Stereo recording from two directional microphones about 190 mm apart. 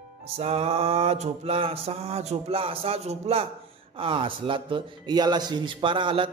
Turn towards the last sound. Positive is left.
turn(degrees=-25)  # may be behind; listen again after turning